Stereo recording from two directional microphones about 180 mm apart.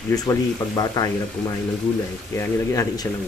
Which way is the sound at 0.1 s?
20° left (ahead or behind).